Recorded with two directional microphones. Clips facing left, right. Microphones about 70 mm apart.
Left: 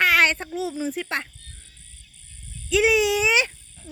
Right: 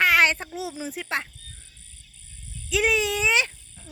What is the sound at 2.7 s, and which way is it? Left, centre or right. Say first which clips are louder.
Speech: left 4 dB; centre.